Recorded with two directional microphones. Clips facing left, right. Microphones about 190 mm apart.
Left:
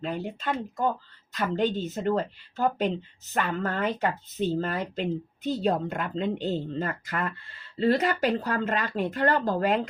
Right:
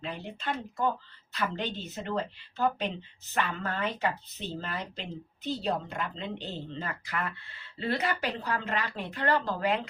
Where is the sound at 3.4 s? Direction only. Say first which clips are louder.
Left 4 dB; 45° left (ahead or behind).